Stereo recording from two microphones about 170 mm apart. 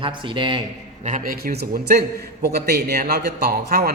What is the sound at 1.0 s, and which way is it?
A man's voice, 50° right (ahead or behind).